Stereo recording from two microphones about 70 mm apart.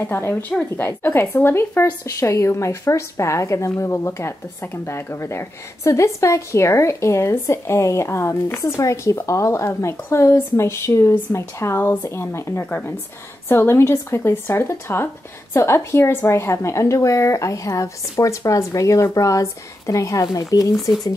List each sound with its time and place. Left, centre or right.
0.0 s speech: left
1.9 s speech: left
2.2 s speech: left